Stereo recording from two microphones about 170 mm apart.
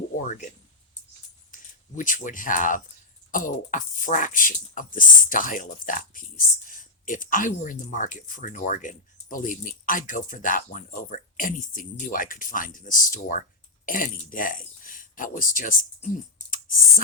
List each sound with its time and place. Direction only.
0.2 s speech: 50° left (ahead or behind)
2.0 s speech: 50° left (ahead or behind)